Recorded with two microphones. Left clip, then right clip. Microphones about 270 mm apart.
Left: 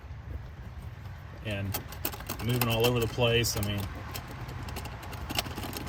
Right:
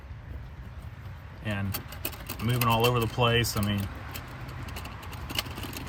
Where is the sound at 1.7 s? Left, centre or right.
Left.